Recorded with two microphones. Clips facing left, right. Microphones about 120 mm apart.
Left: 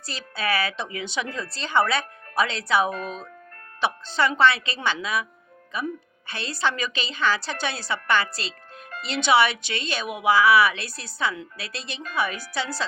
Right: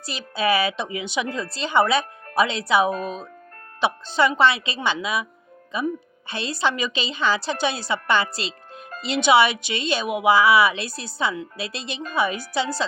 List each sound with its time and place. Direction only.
0.0 s a woman's voice: 15° right (ahead or behind)